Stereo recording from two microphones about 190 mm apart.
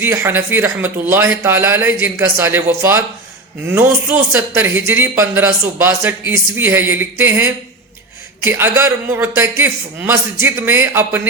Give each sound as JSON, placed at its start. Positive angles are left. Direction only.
{"t": 0.0, "sound": "a man's voice", "side_deg": -10}